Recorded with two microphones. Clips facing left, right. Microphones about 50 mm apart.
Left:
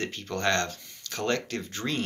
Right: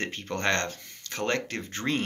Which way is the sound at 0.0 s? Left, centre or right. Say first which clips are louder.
Even; right.